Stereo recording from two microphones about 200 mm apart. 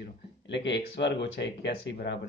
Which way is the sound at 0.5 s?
60° left (ahead or behind).